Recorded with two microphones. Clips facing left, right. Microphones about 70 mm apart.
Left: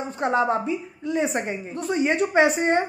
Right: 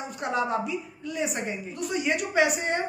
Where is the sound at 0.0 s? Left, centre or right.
Left.